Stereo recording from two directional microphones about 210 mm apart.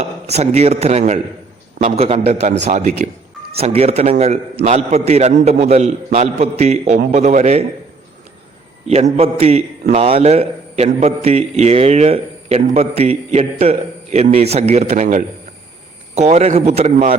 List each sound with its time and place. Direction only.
0.0 s a man's voice: 30° right (ahead or behind)
8.9 s a man's voice: 30° right (ahead or behind)